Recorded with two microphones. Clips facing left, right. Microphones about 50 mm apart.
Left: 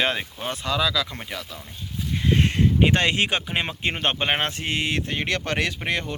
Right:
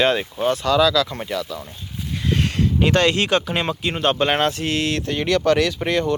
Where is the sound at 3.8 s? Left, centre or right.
Left.